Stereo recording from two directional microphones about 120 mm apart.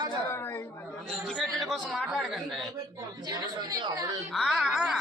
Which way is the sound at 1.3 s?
5° left (ahead or behind).